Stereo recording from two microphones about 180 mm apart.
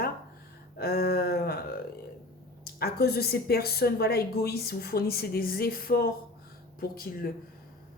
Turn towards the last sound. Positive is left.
turn(degrees=55)  # may be behind; listen again after turning